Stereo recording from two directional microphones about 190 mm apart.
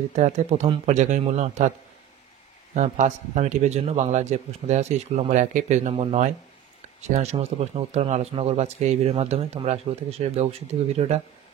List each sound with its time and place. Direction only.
0.1 s speech: 35° right (ahead or behind)
2.7 s speech: 40° right (ahead or behind)